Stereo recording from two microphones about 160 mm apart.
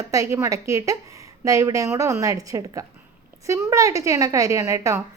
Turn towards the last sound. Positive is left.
turn(degrees=-20)  # may be behind; listen again after turning